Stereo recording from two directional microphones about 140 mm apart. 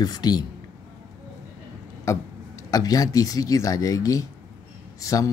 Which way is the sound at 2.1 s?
20° left (ahead or behind).